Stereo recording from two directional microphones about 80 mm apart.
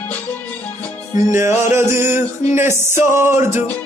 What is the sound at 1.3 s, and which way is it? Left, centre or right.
Music, right.